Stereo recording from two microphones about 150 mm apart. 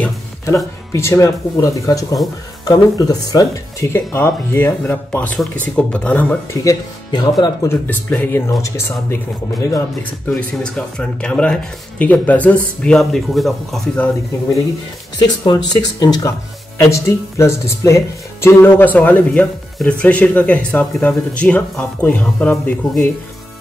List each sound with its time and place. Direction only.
0.9 s speech: 20° left (ahead or behind)
6.6 s speech: 25° left (ahead or behind)
10.6 s speech: 5° left (ahead or behind)
15.2 s speech: 25° left (ahead or behind); by 22.8 s 10° left (ahead or behind)